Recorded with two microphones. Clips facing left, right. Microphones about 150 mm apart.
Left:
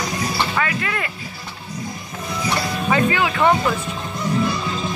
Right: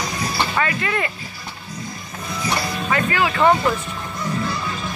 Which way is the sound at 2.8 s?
15° left (ahead or behind).